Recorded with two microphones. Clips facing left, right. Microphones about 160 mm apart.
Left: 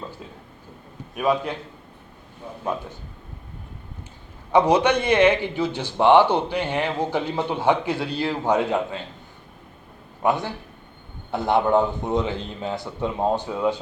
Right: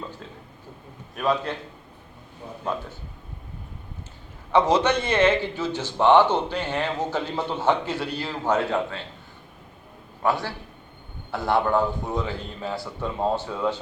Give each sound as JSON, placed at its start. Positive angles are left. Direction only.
{"t": 1.1, "sound": "a man's voice", "side_deg": 10}
{"t": 4.5, "sound": "a man's voice", "side_deg": 15}
{"t": 10.2, "sound": "a man's voice", "side_deg": 20}